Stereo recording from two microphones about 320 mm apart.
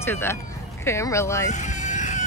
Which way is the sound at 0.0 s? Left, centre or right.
Centre.